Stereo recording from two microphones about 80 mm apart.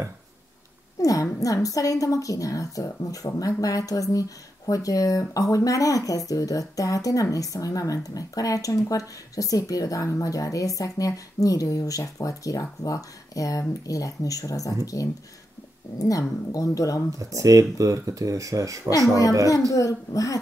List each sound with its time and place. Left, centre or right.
1.0 s speech: left
16.0 s speech: left
17.2 s speech: right
19.7 s speech: left